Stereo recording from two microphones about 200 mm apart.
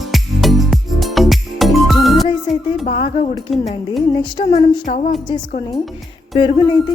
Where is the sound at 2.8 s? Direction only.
35° left (ahead or behind).